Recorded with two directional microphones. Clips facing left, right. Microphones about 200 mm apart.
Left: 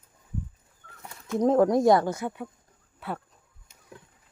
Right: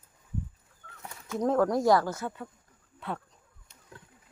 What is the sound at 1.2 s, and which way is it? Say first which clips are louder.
Speech: left 5 dB; 20° left (ahead or behind).